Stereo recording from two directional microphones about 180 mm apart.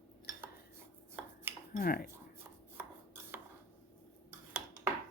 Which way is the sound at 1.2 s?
10° right (ahead or behind).